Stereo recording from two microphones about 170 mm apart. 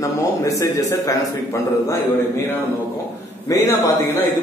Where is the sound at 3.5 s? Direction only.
20° left (ahead or behind).